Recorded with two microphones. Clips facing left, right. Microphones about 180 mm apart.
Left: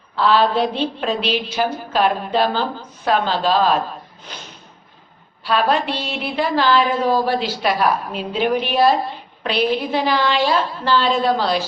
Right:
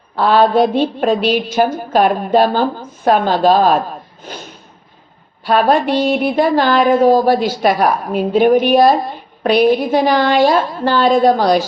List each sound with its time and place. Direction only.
0.2 s a woman's voice: 50° right (ahead or behind)
5.4 s a woman's voice: 50° right (ahead or behind)